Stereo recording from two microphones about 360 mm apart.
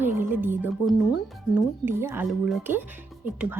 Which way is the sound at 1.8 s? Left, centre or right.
Centre.